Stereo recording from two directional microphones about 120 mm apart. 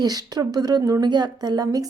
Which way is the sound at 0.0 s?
35° right (ahead or behind).